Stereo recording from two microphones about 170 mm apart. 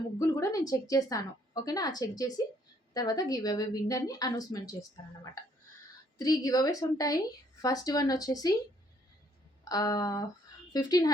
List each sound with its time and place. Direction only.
0.2 s a woman's voice: 20° left (ahead or behind)
9.6 s a woman's voice: 20° left (ahead or behind)